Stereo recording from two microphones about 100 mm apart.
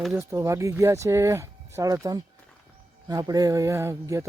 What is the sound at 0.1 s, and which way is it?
Speech, 25° right (ahead or behind).